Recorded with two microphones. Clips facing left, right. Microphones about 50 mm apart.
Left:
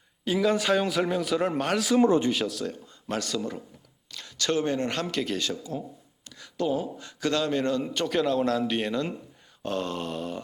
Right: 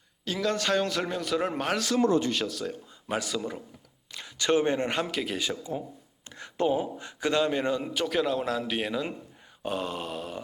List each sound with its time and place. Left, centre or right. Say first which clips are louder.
0.3 s a man's voice: left 4 dB; centre
2.0 s speech: left 2 dB; left
2.3 s speech: left 2 dB; centre
6.2 s speech: right 2 dB; right
7.9 s a man's voice: left 3 dB; centre